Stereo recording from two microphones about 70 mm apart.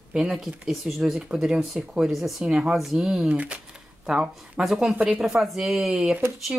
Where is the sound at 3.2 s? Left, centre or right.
Right.